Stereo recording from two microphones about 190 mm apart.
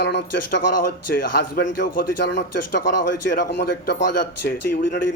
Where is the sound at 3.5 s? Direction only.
65° left (ahead or behind).